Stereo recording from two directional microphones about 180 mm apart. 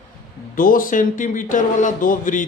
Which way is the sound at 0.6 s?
50° left (ahead or behind).